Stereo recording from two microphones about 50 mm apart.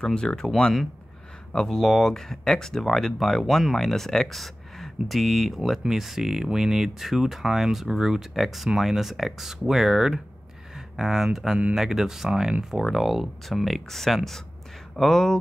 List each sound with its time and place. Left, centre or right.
0.0 s speech: centre